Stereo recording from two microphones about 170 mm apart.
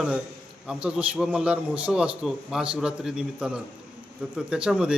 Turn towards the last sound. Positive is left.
turn(degrees=-5)  # may be behind; listen again after turning